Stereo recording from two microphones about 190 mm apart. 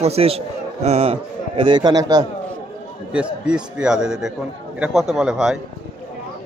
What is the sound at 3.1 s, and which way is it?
A man's voice, 5° right (ahead or behind).